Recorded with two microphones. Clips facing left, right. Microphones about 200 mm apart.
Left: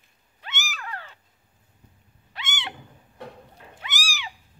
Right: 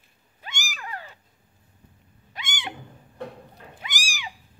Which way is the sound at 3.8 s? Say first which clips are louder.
Left 1 dB; 15° right (ahead or behind).